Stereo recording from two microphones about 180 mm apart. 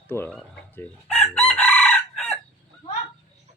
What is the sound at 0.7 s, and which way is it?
Chicken, 5° left (ahead or behind).